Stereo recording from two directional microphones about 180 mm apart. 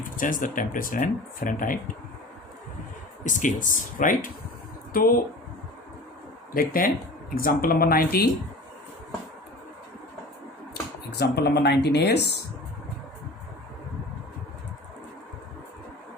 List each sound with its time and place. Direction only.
0.2 s speech: 50° left (ahead or behind)
3.2 s speech: 45° left (ahead or behind)
6.5 s speech: 50° left (ahead or behind)
11.2 s speech: 65° left (ahead or behind)